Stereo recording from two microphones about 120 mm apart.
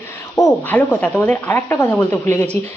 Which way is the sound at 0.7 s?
15° left (ahead or behind).